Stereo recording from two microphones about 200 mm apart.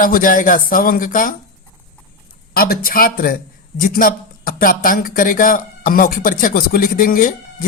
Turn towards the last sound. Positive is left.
turn(degrees=45)  # may be behind; listen again after turning